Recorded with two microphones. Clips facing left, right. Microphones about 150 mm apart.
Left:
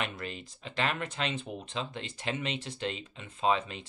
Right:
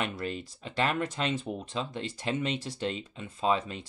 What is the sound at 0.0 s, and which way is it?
Speech, 45° right (ahead or behind).